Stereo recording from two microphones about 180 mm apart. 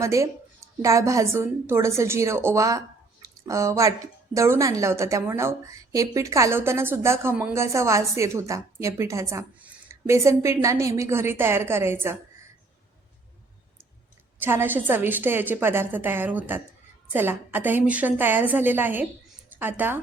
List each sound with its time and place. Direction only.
0.0 s a woman's voice: 15° right (ahead or behind)
14.4 s a woman's voice: 10° right (ahead or behind)